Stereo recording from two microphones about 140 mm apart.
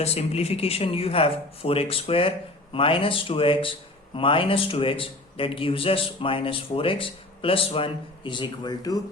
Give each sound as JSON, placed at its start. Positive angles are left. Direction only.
{"t": 0.0, "sound": "a man's voice", "side_deg": 50}